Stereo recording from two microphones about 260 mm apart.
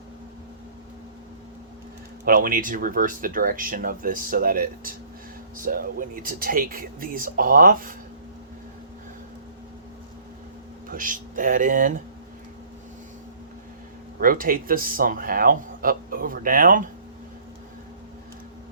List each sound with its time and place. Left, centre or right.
2.2 s speech: right
10.8 s speech: right
14.2 s speech: right